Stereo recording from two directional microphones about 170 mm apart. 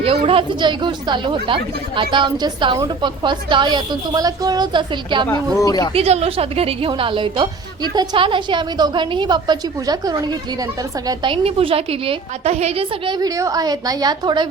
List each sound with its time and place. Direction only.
0.0 s a woman's voice: 35° right (ahead or behind)
5.5 s speech: 20° left (ahead or behind)
5.9 s a woman's voice: 35° right (ahead or behind)
13.1 s a woman's voice: 20° right (ahead or behind)